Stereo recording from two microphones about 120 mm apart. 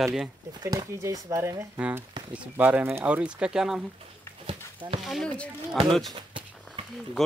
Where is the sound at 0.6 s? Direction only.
30° right (ahead or behind).